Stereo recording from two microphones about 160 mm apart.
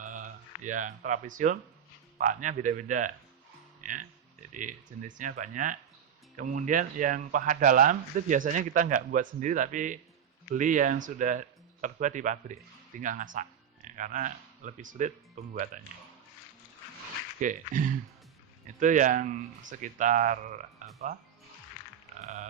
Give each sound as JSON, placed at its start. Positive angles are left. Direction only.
{"t": 0.0, "sound": "a sound", "side_deg": -50}
{"t": 2.1, "sound": "speech", "side_deg": -55}
{"t": 3.8, "sound": "music", "side_deg": -55}
{"t": 4.5, "sound": "speech", "side_deg": -55}
{"t": 17.4, "sound": "speech", "side_deg": -55}
{"t": 22.2, "sound": "grunt", "side_deg": -45}